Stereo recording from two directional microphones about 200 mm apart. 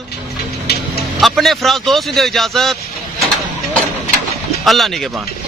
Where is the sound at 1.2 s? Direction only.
Centre (ahead or behind).